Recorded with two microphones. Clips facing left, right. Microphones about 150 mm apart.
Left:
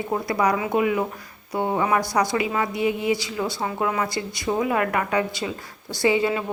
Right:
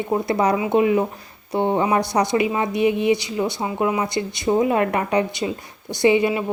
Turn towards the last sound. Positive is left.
turn(degrees=-15)  # may be behind; listen again after turning